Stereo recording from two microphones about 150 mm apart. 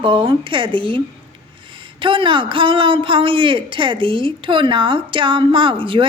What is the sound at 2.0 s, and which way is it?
A woman's voice, 35° right (ahead or behind).